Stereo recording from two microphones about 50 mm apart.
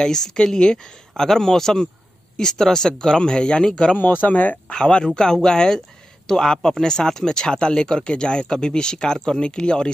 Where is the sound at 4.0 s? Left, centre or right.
Left.